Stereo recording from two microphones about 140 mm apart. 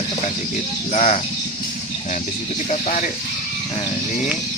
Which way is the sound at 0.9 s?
55° left (ahead or behind).